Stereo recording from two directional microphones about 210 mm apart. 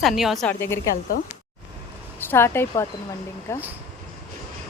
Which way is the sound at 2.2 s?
10° left (ahead or behind).